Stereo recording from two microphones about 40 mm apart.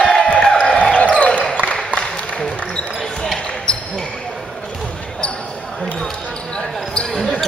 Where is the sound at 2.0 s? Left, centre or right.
Centre.